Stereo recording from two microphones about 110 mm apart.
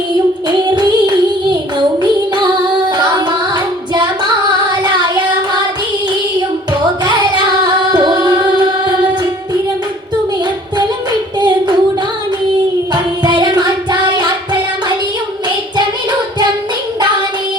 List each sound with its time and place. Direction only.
0.4 s child singing: 40° right (ahead or behind)
2.0 s female singing: 45° right (ahead or behind)
2.9 s music: 40° right (ahead or behind)
4.7 s a sound: 40° right (ahead or behind)
7.0 s music: 40° right (ahead or behind)
11.3 s a sound: 40° right (ahead or behind)
12.9 s music: 40° right (ahead or behind)